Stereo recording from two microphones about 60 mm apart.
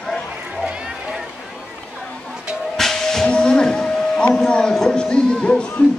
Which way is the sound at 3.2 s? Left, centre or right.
Centre.